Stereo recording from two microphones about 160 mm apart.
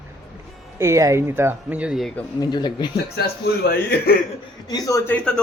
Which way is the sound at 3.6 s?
70° left (ahead or behind).